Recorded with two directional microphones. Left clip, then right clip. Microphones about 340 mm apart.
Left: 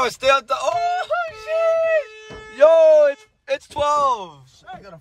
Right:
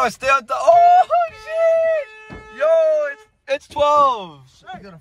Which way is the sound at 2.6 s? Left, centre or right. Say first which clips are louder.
Left 4 dB; centre.